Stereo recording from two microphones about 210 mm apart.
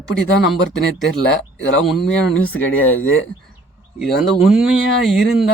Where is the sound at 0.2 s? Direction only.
Centre (ahead or behind).